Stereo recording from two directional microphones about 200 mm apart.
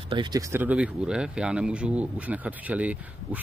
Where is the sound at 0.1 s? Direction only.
20° right (ahead or behind).